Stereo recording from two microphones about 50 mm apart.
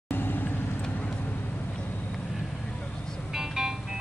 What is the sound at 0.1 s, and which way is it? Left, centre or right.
Vehicle, left.